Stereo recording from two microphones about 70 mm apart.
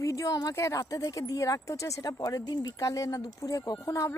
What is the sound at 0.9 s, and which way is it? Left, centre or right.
Speech, left.